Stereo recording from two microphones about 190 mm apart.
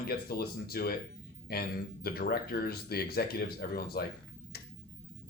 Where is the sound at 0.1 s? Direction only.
55° left (ahead or behind).